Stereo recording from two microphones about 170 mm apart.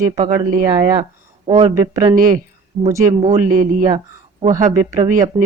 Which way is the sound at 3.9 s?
35° right (ahead or behind).